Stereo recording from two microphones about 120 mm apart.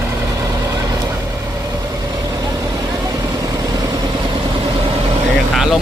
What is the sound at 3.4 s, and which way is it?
Vehicle, 30° right (ahead or behind).